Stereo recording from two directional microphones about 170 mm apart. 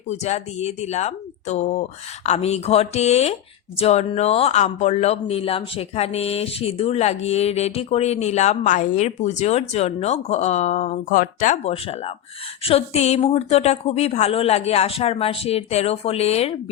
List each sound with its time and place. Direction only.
0.1 s speech: 40° left (ahead or behind)